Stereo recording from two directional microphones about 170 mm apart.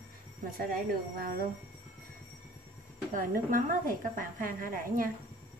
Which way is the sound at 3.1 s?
50° right (ahead or behind).